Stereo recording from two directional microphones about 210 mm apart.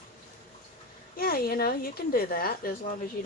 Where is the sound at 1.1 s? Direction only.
45° left (ahead or behind).